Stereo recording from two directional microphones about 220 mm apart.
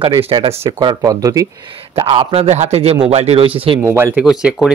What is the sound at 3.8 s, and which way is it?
Speech, 10° right (ahead or behind).